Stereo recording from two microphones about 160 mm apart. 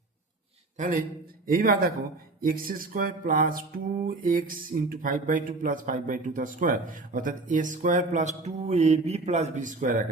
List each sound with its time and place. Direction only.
0.8 s speech: 55° right (ahead or behind)